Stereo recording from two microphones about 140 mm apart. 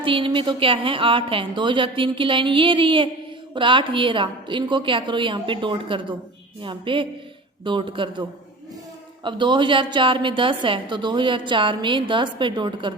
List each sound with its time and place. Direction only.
0.0 s a woman's voice: 40° right (ahead or behind)
9.2 s a woman's voice: 35° right (ahead or behind)